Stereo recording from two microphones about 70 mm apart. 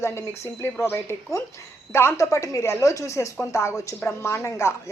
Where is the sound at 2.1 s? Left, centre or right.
Left.